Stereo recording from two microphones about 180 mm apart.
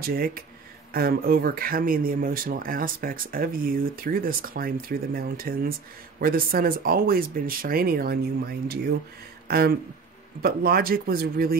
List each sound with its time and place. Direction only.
0.0 s speech: 55° right (ahead or behind)